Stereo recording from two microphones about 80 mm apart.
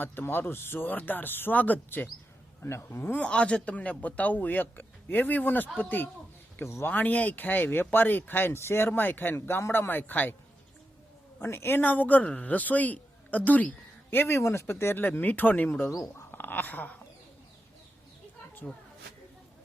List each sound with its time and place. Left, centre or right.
0.0 s a man's voice: left
2.6 s speech: left
3.2 s a man's voice: centre
6.6 s a man's voice: left
11.3 s a man's voice: left
15.9 s speech: left
16.3 s speech: left
18.7 s speech: centre